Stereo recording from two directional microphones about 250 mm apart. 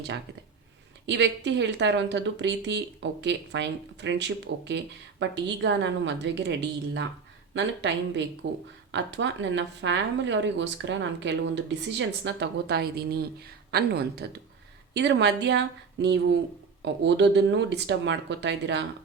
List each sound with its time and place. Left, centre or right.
1.0 s speech: right